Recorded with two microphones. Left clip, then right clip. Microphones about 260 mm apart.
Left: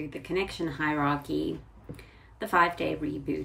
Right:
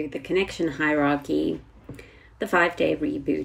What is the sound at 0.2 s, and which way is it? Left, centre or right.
Speech, centre.